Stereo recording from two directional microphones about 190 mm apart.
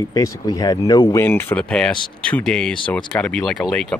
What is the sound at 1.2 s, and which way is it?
Speech, 10° left (ahead or behind).